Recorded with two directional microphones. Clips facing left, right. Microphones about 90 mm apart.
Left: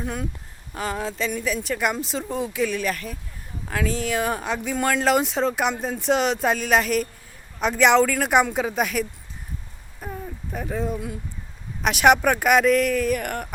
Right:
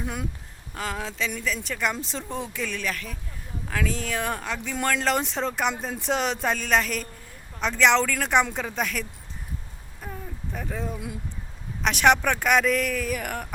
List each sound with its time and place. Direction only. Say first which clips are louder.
0.0 s speech: left 3 dB; 5° right (ahead or behind)
0.7 s speech: left 4 dB; 5° left (ahead or behind)
10.0 s a sound: left 4 dB; 10° left (ahead or behind)
11.8 s speech: left 3 dB; 10° left (ahead or behind)